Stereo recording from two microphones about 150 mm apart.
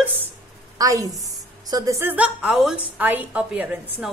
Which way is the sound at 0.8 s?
25° right (ahead or behind).